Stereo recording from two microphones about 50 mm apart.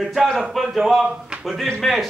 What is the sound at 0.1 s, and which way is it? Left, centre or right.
A man's voice, centre.